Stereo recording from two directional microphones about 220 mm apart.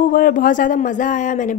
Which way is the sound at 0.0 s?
40° left (ahead or behind).